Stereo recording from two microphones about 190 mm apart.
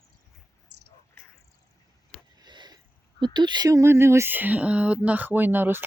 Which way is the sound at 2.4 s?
20° right (ahead or behind).